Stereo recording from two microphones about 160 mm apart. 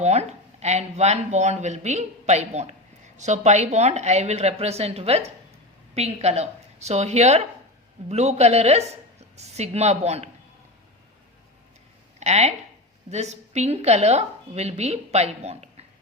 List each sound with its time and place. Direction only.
0.0 s a woman's voice: 45° right (ahead or behind)
12.2 s a woman's voice: 45° right (ahead or behind)